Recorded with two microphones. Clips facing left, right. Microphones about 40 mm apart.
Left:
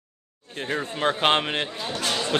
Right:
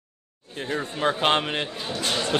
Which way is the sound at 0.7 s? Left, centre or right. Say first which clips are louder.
Even; centre.